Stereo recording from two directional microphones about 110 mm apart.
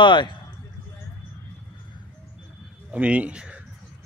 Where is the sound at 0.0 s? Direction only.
45° left (ahead or behind).